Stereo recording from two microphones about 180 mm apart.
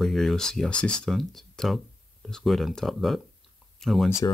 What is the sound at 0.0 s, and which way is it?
Speech, centre (ahead or behind).